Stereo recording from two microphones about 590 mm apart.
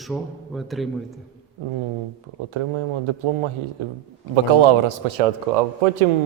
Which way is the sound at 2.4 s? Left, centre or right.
Right.